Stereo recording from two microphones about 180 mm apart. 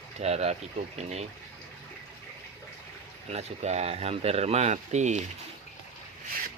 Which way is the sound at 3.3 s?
35° right (ahead or behind).